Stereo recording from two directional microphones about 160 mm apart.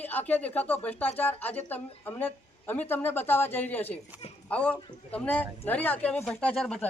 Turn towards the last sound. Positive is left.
turn(degrees=5)  # may be behind; listen again after turning